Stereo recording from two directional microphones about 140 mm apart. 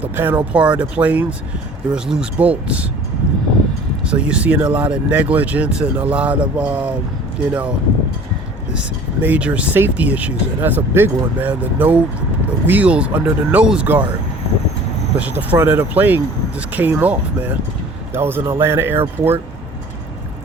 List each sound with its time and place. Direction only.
0.0 s speech: 15° right (ahead or behind)
4.0 s speech: 5° right (ahead or behind)
8.7 s speech: 10° right (ahead or behind)
15.2 s speech: 10° right (ahead or behind)